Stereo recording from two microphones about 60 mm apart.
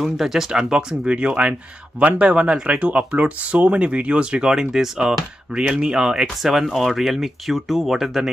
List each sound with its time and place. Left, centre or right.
0.0 s speech: centre
6.4 s speech: centre